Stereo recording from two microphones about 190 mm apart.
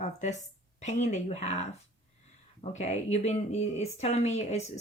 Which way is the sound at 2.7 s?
35° left (ahead or behind).